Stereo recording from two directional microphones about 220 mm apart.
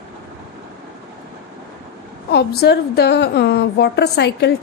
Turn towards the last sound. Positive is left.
turn(degrees=50)  # may be behind; listen again after turning